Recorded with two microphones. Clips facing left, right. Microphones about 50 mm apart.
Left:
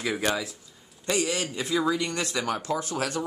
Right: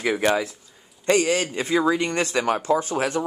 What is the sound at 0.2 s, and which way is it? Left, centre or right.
A man's voice, right.